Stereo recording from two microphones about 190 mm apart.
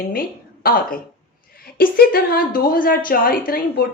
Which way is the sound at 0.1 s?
50° left (ahead or behind).